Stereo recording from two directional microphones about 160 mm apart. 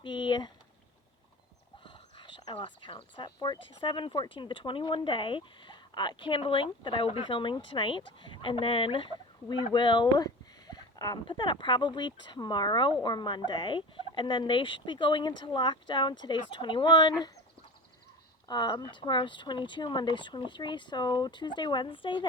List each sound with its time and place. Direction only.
0.0 s a sound: 30° left (ahead or behind)
1.8 s speech: 30° left (ahead or behind)
18.4 s speech: 25° left (ahead or behind)